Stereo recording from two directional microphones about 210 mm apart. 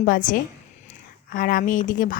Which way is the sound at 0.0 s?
40° left (ahead or behind).